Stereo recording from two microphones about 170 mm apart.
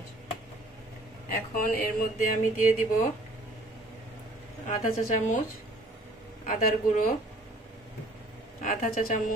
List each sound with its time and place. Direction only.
1.3 s speech: 55° left (ahead or behind)
4.6 s speech: 50° left (ahead or behind)
6.4 s speech: 50° left (ahead or behind)
8.6 s speech: 50° left (ahead or behind)